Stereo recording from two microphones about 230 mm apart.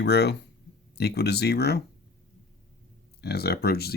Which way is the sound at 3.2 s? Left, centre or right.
Left.